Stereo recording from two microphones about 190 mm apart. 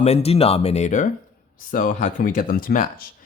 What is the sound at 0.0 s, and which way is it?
Speech, 35° left (ahead or behind).